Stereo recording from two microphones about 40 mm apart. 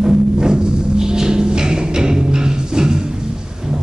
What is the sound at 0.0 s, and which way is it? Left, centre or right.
Music, centre.